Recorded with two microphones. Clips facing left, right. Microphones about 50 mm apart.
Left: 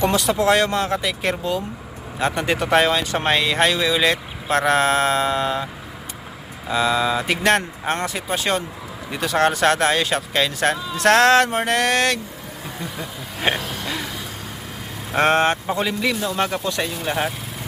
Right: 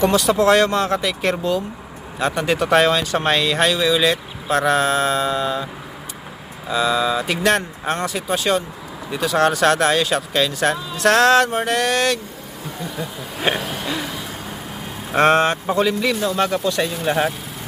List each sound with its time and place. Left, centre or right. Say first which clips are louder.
0.0 s speech: right 3 dB; left
2.2 s speech: right 2 dB; left
6.7 s speech: right 1 dB; left
13.5 s a sound: right 2 dB; centre
15.1 s speech: right 3 dB; centre
15.7 s speech: right 3 dB; centre
17.1 s speech: right 4 dB; centre